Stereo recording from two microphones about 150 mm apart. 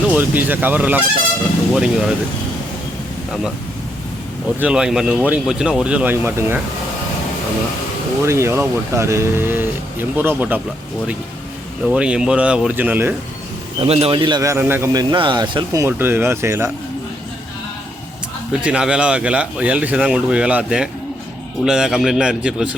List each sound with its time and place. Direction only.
0.1 s a man's voice: 10° right (ahead or behind)
4.6 s speech: 5° right (ahead or behind)
8.2 s speech: 20° right (ahead or behind)
11.9 s speech: 5° right (ahead or behind)
13.8 s a man's voice: 40° right (ahead or behind); by 14.8 s 15° right (ahead or behind)
14.9 s speech: 30° right (ahead or behind)
15.7 s speech: 15° right (ahead or behind)
18.6 s a man's voice: 5° right (ahead or behind)